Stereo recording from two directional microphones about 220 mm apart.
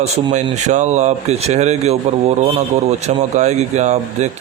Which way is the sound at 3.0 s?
30° right (ahead or behind).